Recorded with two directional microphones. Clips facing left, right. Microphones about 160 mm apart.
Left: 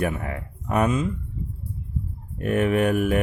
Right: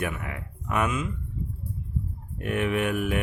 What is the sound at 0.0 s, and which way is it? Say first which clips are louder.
Speech: left 5 dB; 35° left (ahead or behind).